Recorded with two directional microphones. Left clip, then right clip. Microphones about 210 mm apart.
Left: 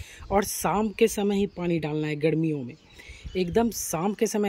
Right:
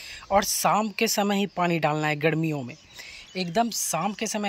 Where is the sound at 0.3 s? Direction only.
20° left (ahead or behind).